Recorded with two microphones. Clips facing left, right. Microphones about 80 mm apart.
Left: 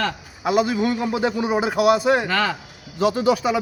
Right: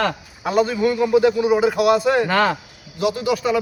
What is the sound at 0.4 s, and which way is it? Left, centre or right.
A man's voice, centre.